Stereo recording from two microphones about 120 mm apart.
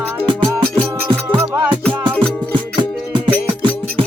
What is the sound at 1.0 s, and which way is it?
Music, 45° right (ahead or behind).